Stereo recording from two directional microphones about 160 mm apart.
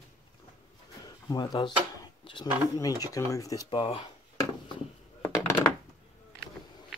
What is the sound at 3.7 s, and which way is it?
Speech, 35° left (ahead or behind).